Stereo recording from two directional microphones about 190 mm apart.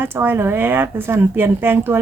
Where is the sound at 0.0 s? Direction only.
10° right (ahead or behind).